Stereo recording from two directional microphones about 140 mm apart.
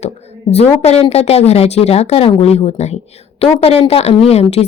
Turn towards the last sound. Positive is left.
turn(degrees=50)  # may be behind; listen again after turning